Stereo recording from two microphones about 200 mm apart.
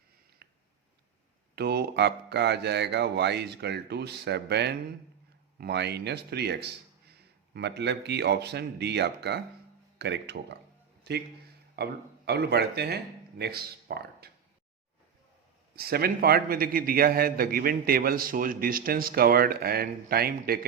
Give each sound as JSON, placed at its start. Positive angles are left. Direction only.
{"t": 0.4, "sound": "a sound", "side_deg": -55}
{"t": 1.5, "sound": "speech", "side_deg": -55}
{"t": 15.7, "sound": "a man's voice", "side_deg": -50}